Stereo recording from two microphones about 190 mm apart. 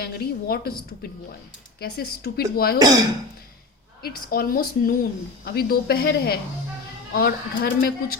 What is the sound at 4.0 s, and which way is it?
Speech, 55° left (ahead or behind).